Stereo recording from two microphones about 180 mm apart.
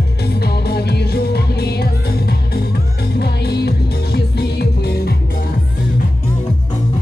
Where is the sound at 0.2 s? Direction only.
65° left (ahead or behind).